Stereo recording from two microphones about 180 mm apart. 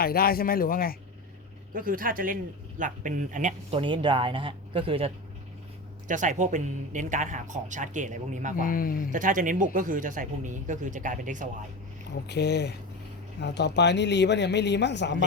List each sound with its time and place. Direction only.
0.0 s speech: 55° left (ahead or behind)
1.7 s speech: 50° right (ahead or behind)
3.7 s speech: 30° right (ahead or behind)
6.1 s speech: 45° right (ahead or behind)
8.5 s speech: 50° left (ahead or behind)
9.1 s speech: 45° right (ahead or behind)
12.3 s speech: 65° left (ahead or behind)